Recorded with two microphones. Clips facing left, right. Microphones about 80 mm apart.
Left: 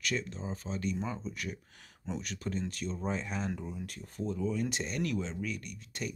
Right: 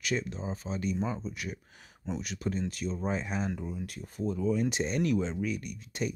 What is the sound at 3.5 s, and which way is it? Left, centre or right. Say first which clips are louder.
Speech: right 3 dB; centre.